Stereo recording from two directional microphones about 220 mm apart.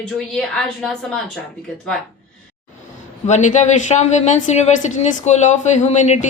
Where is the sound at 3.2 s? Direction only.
35° left (ahead or behind).